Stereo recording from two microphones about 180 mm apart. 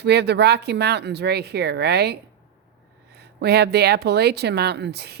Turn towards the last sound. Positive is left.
turn(degrees=-65)  # may be behind; listen again after turning